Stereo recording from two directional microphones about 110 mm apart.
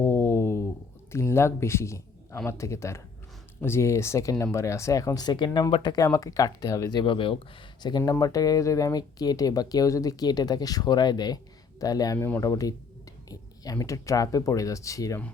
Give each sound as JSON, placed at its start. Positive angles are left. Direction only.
{"t": 0.0, "sound": "a sound", "side_deg": 20}
{"t": 1.1, "sound": "speech", "side_deg": 25}
{"t": 7.8, "sound": "speech", "side_deg": 40}